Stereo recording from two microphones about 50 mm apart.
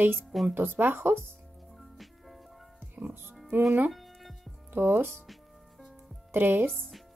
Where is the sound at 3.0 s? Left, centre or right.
Right.